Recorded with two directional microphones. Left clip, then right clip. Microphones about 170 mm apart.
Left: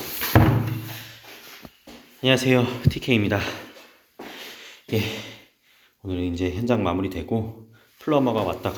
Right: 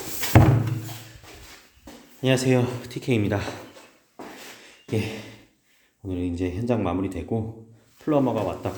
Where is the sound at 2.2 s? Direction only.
5° right (ahead or behind).